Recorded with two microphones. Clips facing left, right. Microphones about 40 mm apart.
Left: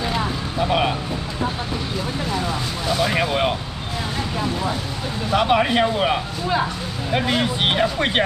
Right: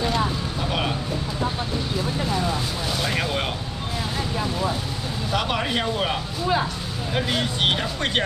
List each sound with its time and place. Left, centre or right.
0.0 s vehicle: centre
2.3 s a sound: centre
5.3 s speech: centre